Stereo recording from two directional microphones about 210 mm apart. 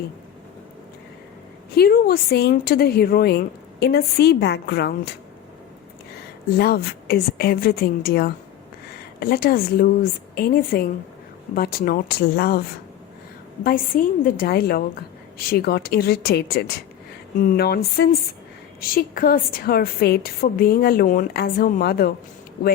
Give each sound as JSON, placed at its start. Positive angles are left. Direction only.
{"t": 1.7, "sound": "a woman's voice", "side_deg": 45}
{"t": 6.6, "sound": "a woman's voice", "side_deg": 50}
{"t": 13.7, "sound": "a woman's voice", "side_deg": 40}